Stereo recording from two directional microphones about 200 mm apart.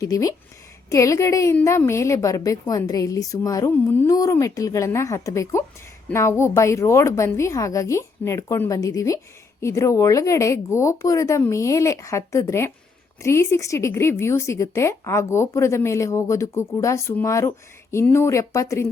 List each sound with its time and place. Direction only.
0.0 s a woman's voice: 15° left (ahead or behind)